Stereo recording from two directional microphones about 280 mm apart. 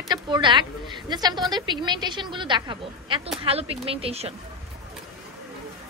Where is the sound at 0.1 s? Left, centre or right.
Centre.